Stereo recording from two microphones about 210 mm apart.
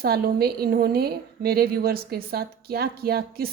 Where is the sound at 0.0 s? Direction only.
45° right (ahead or behind).